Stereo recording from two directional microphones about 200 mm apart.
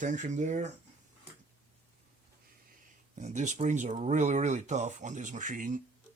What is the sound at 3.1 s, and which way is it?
Speech, 35° right (ahead or behind).